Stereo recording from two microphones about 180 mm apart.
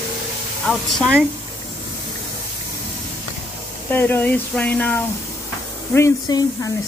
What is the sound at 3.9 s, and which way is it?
Speech, 10° left (ahead or behind).